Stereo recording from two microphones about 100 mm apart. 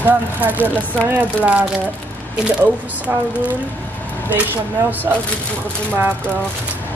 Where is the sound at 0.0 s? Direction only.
20° right (ahead or behind).